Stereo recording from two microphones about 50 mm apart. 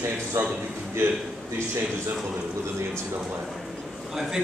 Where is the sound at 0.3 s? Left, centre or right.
Right.